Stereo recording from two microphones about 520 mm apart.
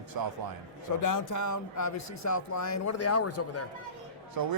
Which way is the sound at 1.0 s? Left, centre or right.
Left.